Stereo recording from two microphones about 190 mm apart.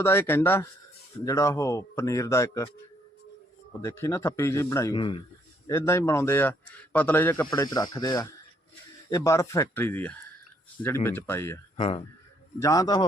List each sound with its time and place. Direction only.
0.0 s a man's voice: 10° left (ahead or behind)
3.7 s a man's voice: 15° left (ahead or behind)
5.6 s a man's voice: 15° left (ahead or behind)
11.8 s a man's voice: 30° left (ahead or behind)
12.5 s a man's voice: 20° left (ahead or behind)